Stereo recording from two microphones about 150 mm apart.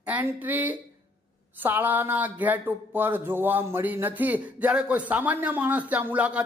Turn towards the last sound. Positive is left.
turn(degrees=-10)  # may be behind; listen again after turning